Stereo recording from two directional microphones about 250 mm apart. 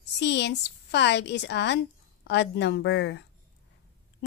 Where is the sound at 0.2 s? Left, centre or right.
Left.